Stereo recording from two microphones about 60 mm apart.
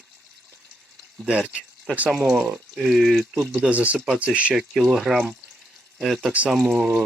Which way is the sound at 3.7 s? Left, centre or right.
Right.